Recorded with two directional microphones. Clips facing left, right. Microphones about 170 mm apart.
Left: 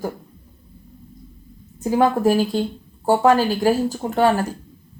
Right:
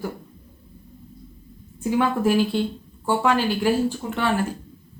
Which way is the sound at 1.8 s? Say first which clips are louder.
Left 4 dB; 40° left (ahead or behind).